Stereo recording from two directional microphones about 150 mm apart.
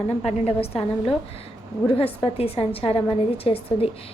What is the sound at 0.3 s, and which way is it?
Speech, 40° left (ahead or behind).